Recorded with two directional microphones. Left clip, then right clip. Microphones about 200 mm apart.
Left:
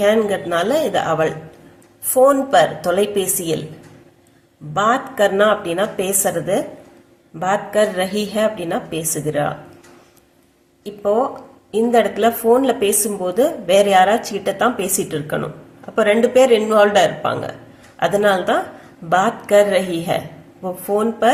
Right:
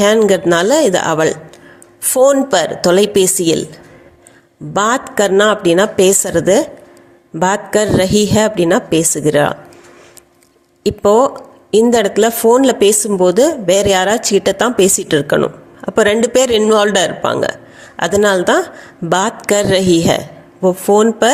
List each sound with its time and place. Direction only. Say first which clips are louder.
0.0 s speech: right 6 dB; 45° right (ahead or behind)
4.7 s speech: right 3 dB; 45° right (ahead or behind)
10.8 s speech: right 8 dB; 45° right (ahead or behind)